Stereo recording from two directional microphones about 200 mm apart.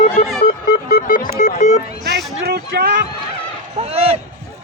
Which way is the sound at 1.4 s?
35° left (ahead or behind).